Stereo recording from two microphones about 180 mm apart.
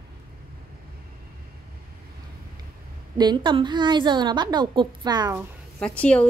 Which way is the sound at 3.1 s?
25° right (ahead or behind).